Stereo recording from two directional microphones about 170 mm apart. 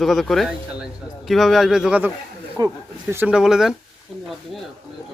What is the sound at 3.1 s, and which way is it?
Speech, 10° right (ahead or behind).